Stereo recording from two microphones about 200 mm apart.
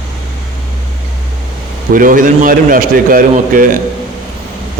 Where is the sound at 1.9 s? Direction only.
40° right (ahead or behind).